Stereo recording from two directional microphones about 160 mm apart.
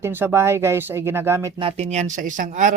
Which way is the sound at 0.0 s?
15° right (ahead or behind).